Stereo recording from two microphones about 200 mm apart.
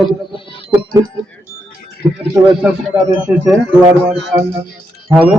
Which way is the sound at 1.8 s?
50° left (ahead or behind).